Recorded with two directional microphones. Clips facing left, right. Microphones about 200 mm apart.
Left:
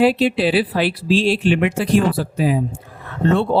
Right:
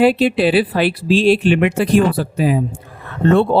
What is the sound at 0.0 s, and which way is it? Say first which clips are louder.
Speech: right 2 dB; 55° right (ahead or behind).